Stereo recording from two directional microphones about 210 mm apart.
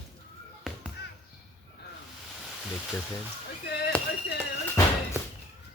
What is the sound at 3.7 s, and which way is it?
Speech, 50° left (ahead or behind).